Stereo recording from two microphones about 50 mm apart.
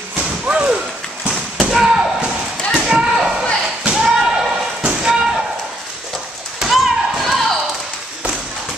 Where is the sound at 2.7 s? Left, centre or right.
Centre.